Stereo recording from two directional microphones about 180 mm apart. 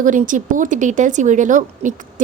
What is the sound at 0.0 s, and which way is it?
A woman's voice, 45° right (ahead or behind).